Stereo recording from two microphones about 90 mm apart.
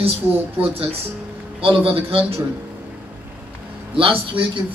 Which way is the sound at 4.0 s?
75° right (ahead or behind).